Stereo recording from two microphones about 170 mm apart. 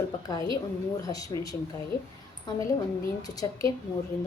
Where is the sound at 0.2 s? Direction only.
20° left (ahead or behind).